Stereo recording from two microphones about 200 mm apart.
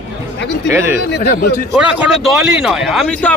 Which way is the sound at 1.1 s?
55° left (ahead or behind).